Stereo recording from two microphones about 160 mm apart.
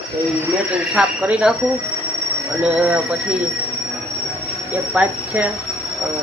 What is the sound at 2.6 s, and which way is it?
Speech, 10° right (ahead or behind).